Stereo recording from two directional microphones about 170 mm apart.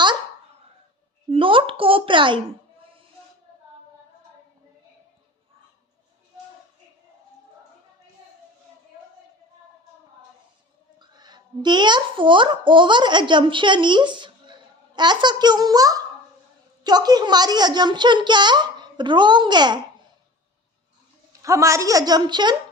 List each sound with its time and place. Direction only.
1.3 s a sound: 30° right (ahead or behind)
11.0 s a child's voice: 25° right (ahead or behind)
21.4 s a woman's voice: 15° right (ahead or behind)